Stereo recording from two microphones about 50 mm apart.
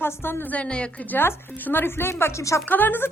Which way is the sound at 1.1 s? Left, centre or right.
Left.